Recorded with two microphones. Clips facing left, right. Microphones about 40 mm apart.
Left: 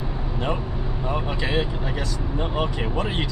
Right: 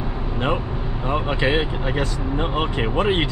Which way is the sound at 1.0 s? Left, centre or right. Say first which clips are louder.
Right 6 dB; right.